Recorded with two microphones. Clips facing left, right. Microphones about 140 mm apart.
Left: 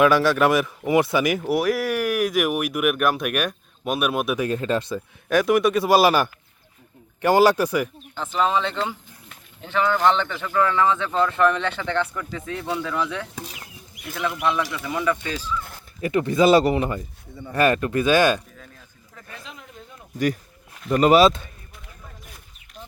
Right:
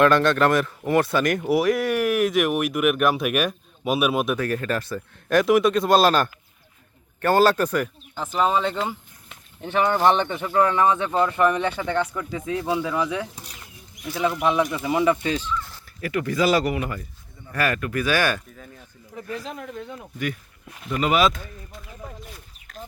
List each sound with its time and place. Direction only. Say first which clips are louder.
0.0 s speech: even; 10° left (ahead or behind)
4.4 s speech: left 2 dB; 20° left (ahead or behind)
4.9 s speech: right 1 dB; centre (ahead or behind)
8.4 s speech: even; 5° right (ahead or behind)
13.5 s bird: left 3 dB; 90° left
14.4 s speech: right 1 dB; 20° right (ahead or behind)
15.4 s speech: right 1 dB; 10° left (ahead or behind)
16.0 s speech: left 4 dB; 25° left (ahead or behind)
19.3 s speech: right 9 dB; 40° right (ahead or behind)
19.5 s speech: right 9 dB; 70° right (ahead or behind)
20.9 s speech: left 5 dB; 40° left (ahead or behind)